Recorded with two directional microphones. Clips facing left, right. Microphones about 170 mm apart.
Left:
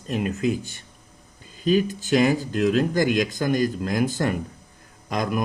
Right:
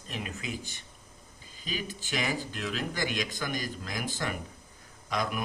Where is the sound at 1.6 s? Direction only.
45° left (ahead or behind).